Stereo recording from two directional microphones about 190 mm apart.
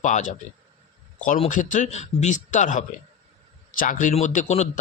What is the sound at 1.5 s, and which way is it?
Speech, 40° left (ahead or behind).